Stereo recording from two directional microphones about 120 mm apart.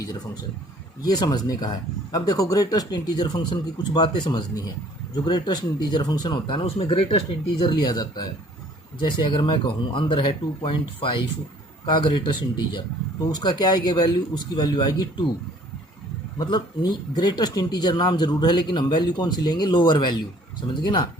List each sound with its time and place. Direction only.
1.0 s speech: 35° left (ahead or behind)
16.4 s speech: 40° left (ahead or behind)